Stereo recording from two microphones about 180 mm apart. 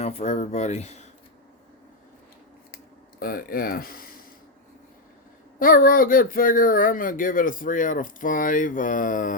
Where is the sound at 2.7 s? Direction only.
55° left (ahead or behind).